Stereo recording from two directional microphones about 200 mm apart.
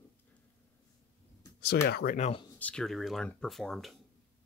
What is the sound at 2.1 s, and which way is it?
Speech, 35° left (ahead or behind).